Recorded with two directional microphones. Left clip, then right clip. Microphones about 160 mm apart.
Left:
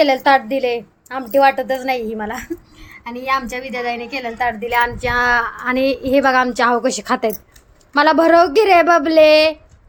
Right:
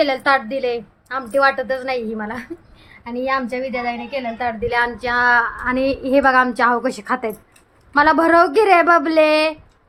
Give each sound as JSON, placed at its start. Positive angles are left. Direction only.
{"t": 0.0, "sound": "a woman's voice", "side_deg": 10}
{"t": 4.6, "sound": "a woman's voice", "side_deg": 0}